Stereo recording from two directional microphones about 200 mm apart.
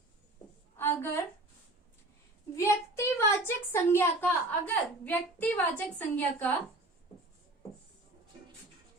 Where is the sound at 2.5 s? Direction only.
15° left (ahead or behind).